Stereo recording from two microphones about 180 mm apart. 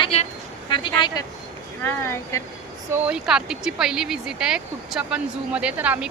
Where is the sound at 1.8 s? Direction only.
15° left (ahead or behind).